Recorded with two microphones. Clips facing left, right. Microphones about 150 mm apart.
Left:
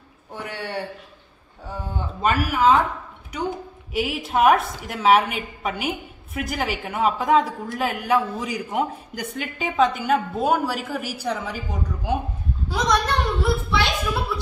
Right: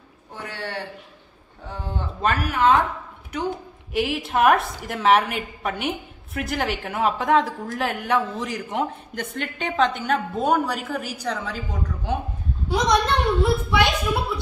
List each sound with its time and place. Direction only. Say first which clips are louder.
0.5 s a sound: left 2 dB; 15° left (ahead or behind)
3.9 s a woman's voice: even; centre (ahead or behind)
12.6 s a woman's voice: right 2 dB; 25° right (ahead or behind)